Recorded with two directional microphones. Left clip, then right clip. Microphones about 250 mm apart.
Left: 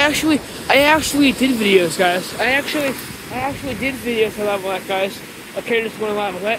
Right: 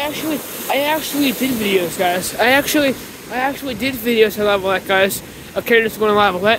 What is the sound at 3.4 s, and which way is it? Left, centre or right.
Speech, centre.